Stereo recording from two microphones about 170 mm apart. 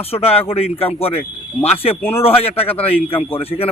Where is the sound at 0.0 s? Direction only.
35° left (ahead or behind).